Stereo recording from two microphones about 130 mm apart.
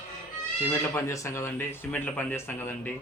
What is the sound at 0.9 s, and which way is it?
Speech, 20° left (ahead or behind).